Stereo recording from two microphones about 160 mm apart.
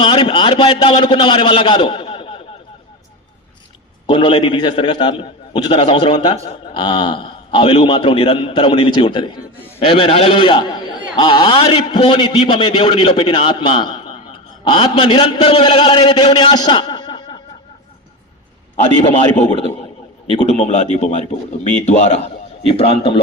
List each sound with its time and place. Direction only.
0.0 s a man's voice: 30° left (ahead or behind)
4.1 s a man's voice: 30° left (ahead or behind)
9.6 s a sound: 15° left (ahead or behind)
9.8 s a man's voice: 35° left (ahead or behind)
20.4 s a man's voice: 45° left (ahead or behind)